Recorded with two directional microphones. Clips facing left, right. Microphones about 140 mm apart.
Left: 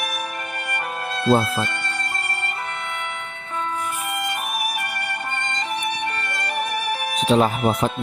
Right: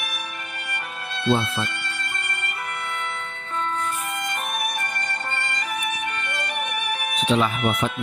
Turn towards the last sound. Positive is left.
turn(degrees=35)  # may be behind; listen again after turning